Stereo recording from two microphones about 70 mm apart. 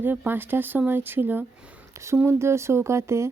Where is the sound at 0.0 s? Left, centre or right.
Right.